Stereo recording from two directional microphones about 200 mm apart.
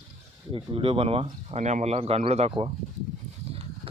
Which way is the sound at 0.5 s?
25° right (ahead or behind).